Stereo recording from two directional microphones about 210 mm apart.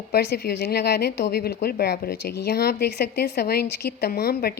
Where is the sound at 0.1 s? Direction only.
50° left (ahead or behind).